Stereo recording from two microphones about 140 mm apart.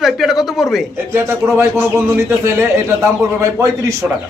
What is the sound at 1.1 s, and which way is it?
A man's voice, 15° right (ahead or behind).